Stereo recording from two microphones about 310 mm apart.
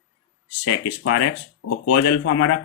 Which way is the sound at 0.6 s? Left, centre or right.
Left.